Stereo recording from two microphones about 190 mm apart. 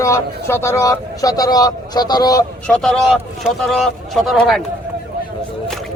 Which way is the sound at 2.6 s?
5° left (ahead or behind).